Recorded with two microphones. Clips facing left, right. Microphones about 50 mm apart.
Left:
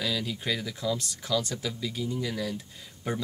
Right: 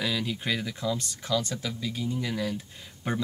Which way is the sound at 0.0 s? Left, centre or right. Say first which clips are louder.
Right 1 dB; right.